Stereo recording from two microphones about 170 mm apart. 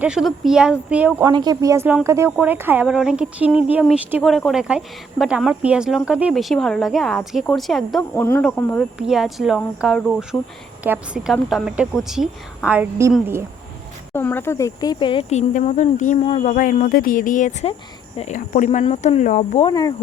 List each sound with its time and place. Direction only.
0.0 s speech: 5° right (ahead or behind)
1.2 s a woman's voice: 25° right (ahead or behind); by 8.0 s centre (ahead or behind)
8.1 s speech: 15° left (ahead or behind)
9.0 s a woman's voice: centre (ahead or behind)
14.1 s speech: 10° left (ahead or behind); by 19.6 s 40° left (ahead or behind)
19.6 s speech: 25° left (ahead or behind)